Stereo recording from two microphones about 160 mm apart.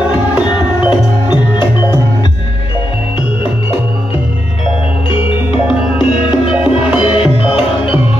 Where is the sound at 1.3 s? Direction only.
30° left (ahead or behind).